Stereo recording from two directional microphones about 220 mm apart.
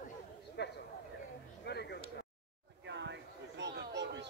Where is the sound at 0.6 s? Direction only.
50° left (ahead or behind).